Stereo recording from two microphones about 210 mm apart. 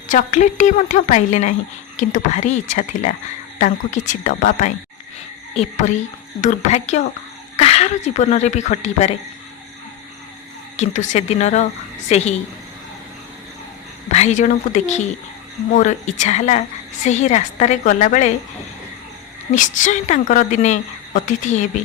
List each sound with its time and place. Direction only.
0.1 s a woman's voice: 35° left (ahead or behind)
10.8 s a woman's voice: 35° left (ahead or behind)
14.1 s a woman's voice: 35° left (ahead or behind)
19.5 s a woman's voice: 35° left (ahead or behind)